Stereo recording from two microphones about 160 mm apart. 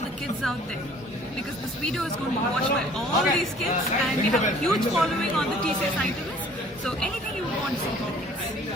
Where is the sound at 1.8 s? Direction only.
Centre (ahead or behind).